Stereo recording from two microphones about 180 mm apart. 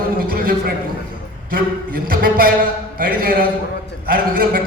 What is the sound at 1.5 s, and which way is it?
A man's voice, 55° right (ahead or behind).